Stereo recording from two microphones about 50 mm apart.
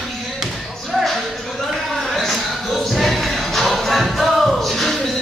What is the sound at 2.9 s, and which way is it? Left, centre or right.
Music, centre.